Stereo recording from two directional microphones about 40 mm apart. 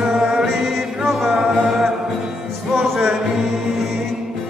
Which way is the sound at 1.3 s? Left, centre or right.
Centre.